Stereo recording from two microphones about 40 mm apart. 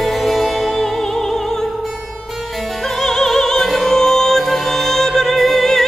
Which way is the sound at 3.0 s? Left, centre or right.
Centre.